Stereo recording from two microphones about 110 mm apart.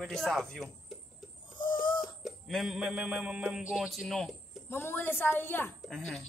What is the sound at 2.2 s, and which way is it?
Music, centre (ahead or behind).